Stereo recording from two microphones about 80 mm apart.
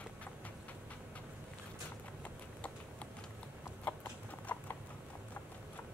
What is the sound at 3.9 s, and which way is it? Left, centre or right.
Clip-clop, centre.